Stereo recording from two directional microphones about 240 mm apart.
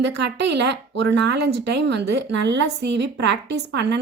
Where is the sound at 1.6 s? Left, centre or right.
Right.